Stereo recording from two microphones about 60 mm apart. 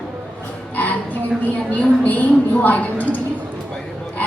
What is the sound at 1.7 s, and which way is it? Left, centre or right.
A woman's voice, left.